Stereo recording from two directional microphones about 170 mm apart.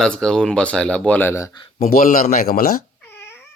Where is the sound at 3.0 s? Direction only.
15° left (ahead or behind).